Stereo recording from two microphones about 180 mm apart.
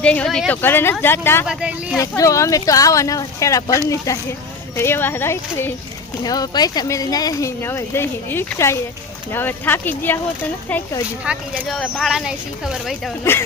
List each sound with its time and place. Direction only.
0.0 s speech: 5° left (ahead or behind)
1.5 s speech: 5° right (ahead or behind)
2.0 s speech: 20° left (ahead or behind)
11.3 s speech: centre (ahead or behind)
13.3 s speech: 15° left (ahead or behind)